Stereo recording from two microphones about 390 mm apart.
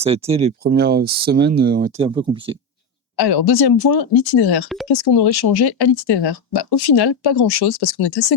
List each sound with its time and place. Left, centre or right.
0.0 s speech: centre
3.2 s speech: left
4.9 s speech: left